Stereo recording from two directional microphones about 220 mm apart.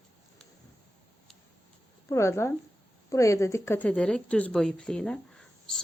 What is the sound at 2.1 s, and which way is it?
Speech, 10° left (ahead or behind).